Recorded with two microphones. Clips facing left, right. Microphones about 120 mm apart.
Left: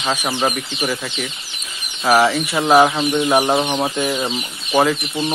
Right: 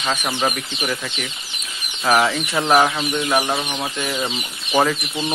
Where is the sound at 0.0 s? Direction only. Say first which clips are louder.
Left 2 dB; 10° left (ahead or behind).